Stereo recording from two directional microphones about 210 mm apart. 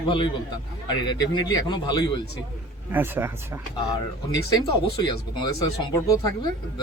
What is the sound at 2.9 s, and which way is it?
Speech, 10° right (ahead or behind).